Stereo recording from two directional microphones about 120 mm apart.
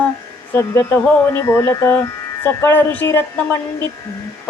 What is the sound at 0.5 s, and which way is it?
Speech, 20° left (ahead or behind).